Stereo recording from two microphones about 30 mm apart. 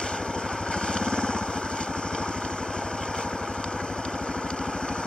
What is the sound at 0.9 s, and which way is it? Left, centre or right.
Vehicle, left.